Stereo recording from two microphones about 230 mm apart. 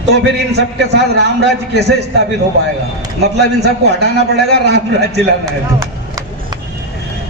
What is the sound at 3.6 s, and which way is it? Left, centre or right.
A man's voice, right.